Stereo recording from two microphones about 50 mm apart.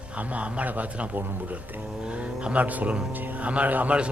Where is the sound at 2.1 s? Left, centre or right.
Right.